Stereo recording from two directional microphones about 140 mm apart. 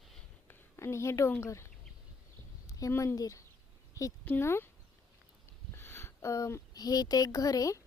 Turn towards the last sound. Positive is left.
turn(degrees=25)  # may be behind; listen again after turning